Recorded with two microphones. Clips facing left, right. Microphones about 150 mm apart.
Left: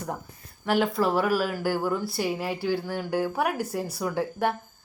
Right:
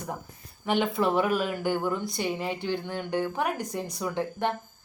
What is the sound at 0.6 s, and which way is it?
Speech, centre (ahead or behind).